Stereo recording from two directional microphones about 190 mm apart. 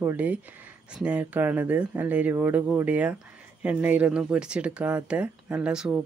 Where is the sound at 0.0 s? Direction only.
10° right (ahead or behind).